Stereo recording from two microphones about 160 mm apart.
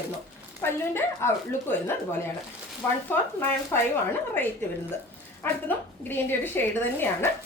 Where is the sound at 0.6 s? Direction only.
15° left (ahead or behind).